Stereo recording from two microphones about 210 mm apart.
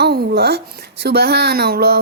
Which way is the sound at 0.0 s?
50° right (ahead or behind).